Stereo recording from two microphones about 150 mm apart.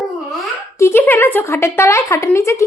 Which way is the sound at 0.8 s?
15° left (ahead or behind).